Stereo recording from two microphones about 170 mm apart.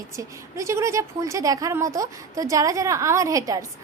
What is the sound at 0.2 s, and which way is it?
A woman's voice, 15° right (ahead or behind).